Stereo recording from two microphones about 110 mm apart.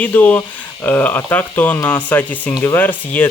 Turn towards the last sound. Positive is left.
turn(degrees=15)  # may be behind; listen again after turning